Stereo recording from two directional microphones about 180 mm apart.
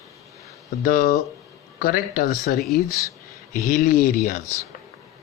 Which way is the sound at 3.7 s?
45° left (ahead or behind).